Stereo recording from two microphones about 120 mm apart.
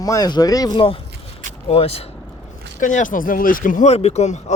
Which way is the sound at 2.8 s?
90° left.